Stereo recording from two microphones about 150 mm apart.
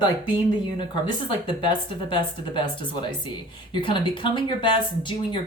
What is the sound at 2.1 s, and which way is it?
Speech, 35° left (ahead or behind).